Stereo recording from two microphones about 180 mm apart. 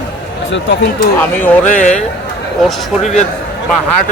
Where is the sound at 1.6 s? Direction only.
45° left (ahead or behind).